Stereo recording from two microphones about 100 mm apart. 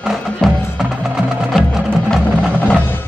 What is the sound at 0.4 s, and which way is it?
Music, 5° left (ahead or behind).